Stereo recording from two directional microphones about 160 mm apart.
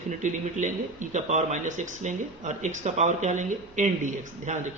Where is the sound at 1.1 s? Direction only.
45° right (ahead or behind).